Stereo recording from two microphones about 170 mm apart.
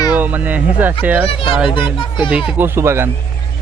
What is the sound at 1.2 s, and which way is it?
Speech, 30° left (ahead or behind).